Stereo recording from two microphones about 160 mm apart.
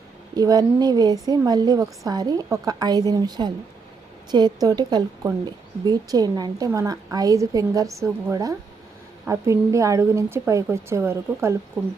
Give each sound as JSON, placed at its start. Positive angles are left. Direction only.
{"t": 0.3, "sound": "a woman's voice", "side_deg": -25}